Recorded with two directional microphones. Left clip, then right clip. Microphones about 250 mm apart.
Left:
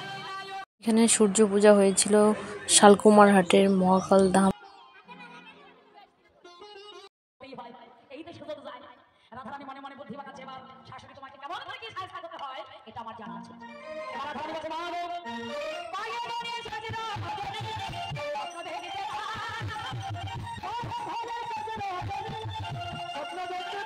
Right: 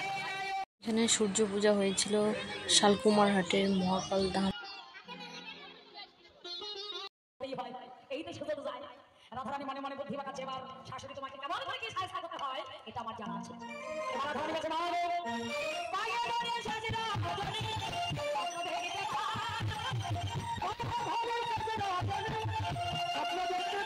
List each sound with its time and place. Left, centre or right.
0.8 s speech: left
9.3 s a sound: right
13.8 s music: right